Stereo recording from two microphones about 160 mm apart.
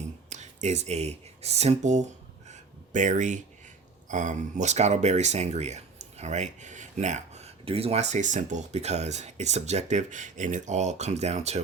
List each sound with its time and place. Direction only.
0.3 s speech: 45° right (ahead or behind)
2.5 s a sound: 50° right (ahead or behind)
4.1 s speech: 50° right (ahead or behind)